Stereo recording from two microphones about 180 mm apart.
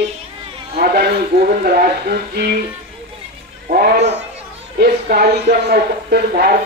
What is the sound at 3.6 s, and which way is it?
A woman's voice, 55° right (ahead or behind).